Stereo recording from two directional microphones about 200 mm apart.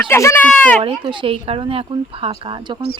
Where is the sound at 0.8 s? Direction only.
25° right (ahead or behind).